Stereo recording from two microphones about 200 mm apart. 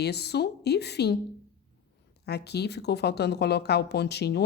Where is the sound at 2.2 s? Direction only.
55° left (ahead or behind).